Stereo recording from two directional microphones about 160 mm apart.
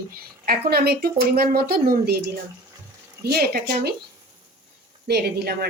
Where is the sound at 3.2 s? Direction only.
75° right (ahead or behind).